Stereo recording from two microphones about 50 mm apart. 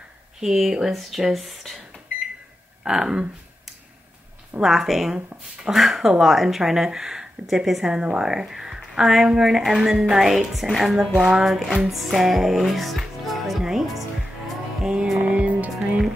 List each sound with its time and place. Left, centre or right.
0.4 s speech: centre
2.8 s speech: centre
4.6 s speech: centre
11.4 s music: centre
15.2 s music: right